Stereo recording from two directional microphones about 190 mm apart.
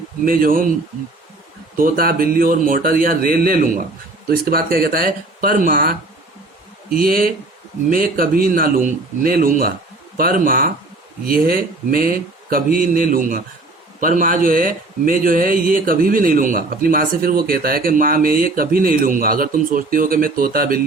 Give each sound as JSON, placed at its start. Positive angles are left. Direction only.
{"t": 0.3, "sound": "speech", "side_deg": -50}
{"t": 1.7, "sound": "speech", "side_deg": -50}